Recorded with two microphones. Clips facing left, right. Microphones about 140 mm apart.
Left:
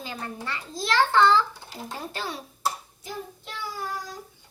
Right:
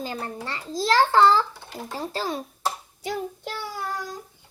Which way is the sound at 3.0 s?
80° right.